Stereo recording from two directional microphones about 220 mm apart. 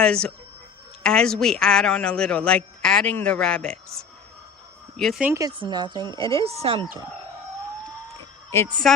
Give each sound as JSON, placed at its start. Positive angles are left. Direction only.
{"t": 0.0, "sound": "a man's voice", "side_deg": 5}
{"t": 4.9, "sound": "a man's voice", "side_deg": 0}
{"t": 5.3, "sound": "speech", "side_deg": -20}
{"t": 8.4, "sound": "speech", "side_deg": 10}